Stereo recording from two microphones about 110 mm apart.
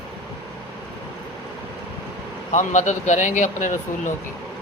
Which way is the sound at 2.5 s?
90° left.